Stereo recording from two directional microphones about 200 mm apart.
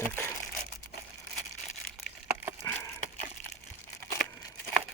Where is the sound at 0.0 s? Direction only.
10° left (ahead or behind).